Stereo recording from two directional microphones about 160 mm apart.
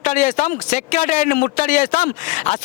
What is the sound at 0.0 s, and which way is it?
A man's voice, 50° left (ahead or behind).